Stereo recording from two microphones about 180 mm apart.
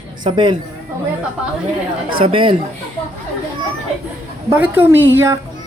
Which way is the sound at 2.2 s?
30° right (ahead or behind).